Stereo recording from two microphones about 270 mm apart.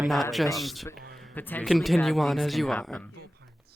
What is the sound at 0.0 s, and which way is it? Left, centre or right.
Speech, centre.